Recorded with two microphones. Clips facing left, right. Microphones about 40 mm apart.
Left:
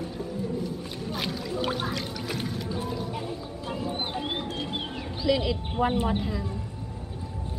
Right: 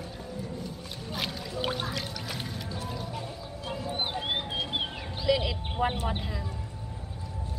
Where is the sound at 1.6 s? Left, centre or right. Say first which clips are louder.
Left 1 dB; centre.